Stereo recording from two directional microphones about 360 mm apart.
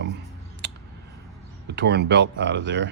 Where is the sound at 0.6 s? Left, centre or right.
Right.